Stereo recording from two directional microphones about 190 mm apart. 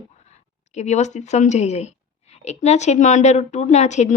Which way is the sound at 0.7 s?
40° left (ahead or behind).